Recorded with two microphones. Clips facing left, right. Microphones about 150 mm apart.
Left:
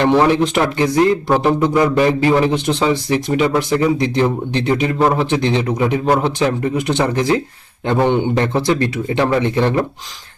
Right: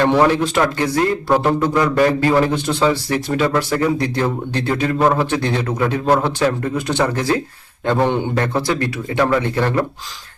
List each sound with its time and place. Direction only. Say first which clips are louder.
0.0 s a man's voice: left 1 dB; 20° left (ahead or behind)